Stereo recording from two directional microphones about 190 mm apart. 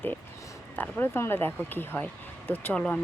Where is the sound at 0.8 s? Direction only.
10° left (ahead or behind).